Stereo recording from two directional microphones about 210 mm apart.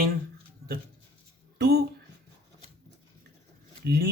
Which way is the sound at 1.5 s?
50° right (ahead or behind).